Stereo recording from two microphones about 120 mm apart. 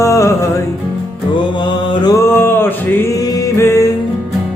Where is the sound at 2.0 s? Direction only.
25° left (ahead or behind).